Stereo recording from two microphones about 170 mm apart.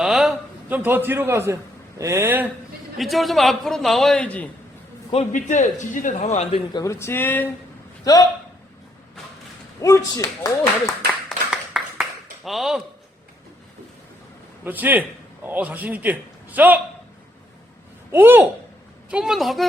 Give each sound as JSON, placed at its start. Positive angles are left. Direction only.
{"t": 0.0, "sound": "a man's voice", "side_deg": 0}
{"t": 3.0, "sound": "a man's voice", "side_deg": 0}
{"t": 5.1, "sound": "a man's voice", "side_deg": 45}
{"t": 6.7, "sound": "a man's voice", "side_deg": 15}
{"t": 9.8, "sound": "speech", "side_deg": 20}
{"t": 11.3, "sound": "clapping", "side_deg": 0}
{"t": 12.5, "sound": "a man's voice", "side_deg": 0}
{"t": 14.6, "sound": "a man's voice", "side_deg": -10}
{"t": 18.1, "sound": "a man's voice", "side_deg": -10}